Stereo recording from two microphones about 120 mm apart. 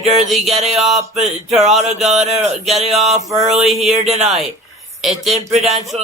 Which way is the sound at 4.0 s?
65° right (ahead or behind).